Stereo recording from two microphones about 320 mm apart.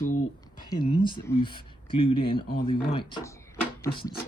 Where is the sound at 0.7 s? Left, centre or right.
Centre.